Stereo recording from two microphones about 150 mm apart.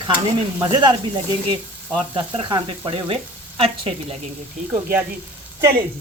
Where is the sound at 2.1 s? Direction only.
35° right (ahead or behind).